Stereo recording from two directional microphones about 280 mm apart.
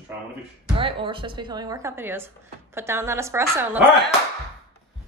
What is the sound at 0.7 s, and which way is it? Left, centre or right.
A woman's voice, centre.